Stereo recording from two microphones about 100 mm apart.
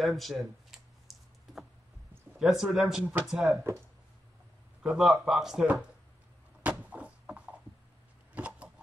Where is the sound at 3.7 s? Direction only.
25° right (ahead or behind).